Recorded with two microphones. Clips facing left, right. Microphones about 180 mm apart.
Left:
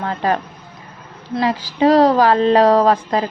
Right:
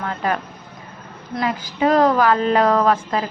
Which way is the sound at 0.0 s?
35° left (ahead or behind).